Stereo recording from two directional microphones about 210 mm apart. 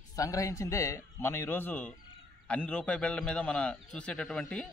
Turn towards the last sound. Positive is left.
turn(degrees=5)  # may be behind; listen again after turning